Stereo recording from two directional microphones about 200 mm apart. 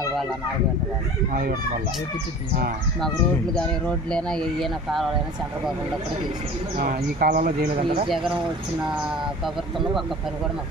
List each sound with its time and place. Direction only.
1.3 s speech: 45° right (ahead or behind)
3.5 s speech: 5° left (ahead or behind)
6.8 s speech: 45° right (ahead or behind)